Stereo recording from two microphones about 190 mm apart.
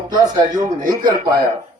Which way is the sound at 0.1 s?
20° right (ahead or behind).